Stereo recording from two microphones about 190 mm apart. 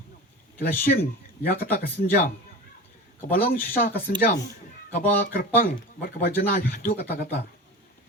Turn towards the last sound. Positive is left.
turn(degrees=50)  # may be behind; listen again after turning